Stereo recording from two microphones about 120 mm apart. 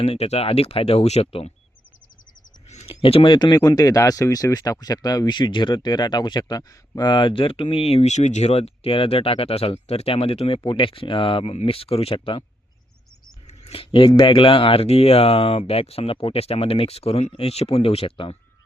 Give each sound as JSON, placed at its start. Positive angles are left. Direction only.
{"t": 0.0, "sound": "speech", "side_deg": 60}
{"t": 2.6, "sound": "a sound", "side_deg": 70}
{"t": 2.9, "sound": "speech", "side_deg": 50}
{"t": 13.5, "sound": "speech", "side_deg": 55}